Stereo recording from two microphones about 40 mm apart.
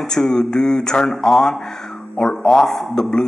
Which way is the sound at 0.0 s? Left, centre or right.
Centre.